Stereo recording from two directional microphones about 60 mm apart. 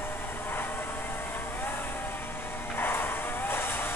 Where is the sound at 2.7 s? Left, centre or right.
Left.